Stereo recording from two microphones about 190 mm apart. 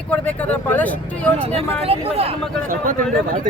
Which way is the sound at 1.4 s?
30° right (ahead or behind).